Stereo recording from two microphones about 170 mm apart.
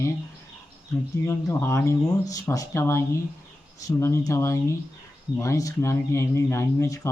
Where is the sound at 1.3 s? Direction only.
15° left (ahead or behind).